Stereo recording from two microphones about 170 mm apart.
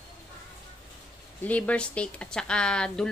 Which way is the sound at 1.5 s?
10° left (ahead or behind).